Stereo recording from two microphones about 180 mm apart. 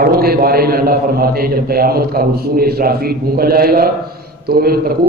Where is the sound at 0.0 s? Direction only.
55° right (ahead or behind).